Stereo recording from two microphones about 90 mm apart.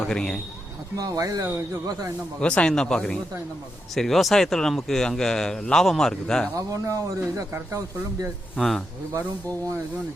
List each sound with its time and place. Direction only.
0.1 s a man's voice: 5° left (ahead or behind)
0.9 s speech: 45° right (ahead or behind)
2.4 s a man's voice: 10° left (ahead or behind)
6.6 s speech: 40° right (ahead or behind)
8.5 s speech: centre (ahead or behind)